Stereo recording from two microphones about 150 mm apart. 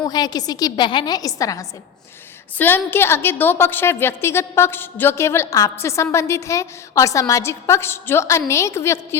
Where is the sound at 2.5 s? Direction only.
15° left (ahead or behind).